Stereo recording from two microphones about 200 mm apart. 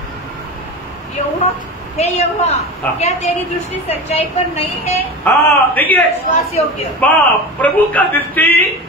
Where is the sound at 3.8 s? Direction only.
30° left (ahead or behind).